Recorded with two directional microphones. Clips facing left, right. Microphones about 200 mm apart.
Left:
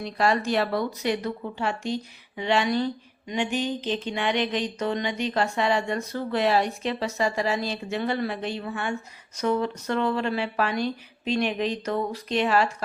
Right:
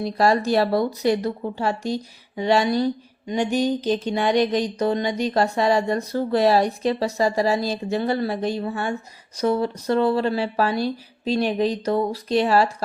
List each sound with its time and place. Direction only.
0.0 s speech: 35° right (ahead or behind)